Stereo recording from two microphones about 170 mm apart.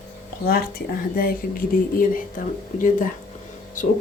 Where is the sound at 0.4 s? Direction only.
60° left (ahead or behind).